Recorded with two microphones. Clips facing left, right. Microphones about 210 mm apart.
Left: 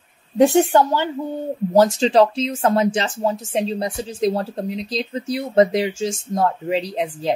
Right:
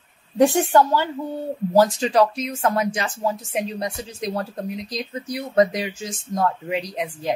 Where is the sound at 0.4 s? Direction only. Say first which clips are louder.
Left 2 dB; 20° left (ahead or behind).